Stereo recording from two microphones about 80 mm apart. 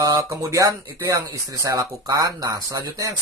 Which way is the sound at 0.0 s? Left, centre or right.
Right.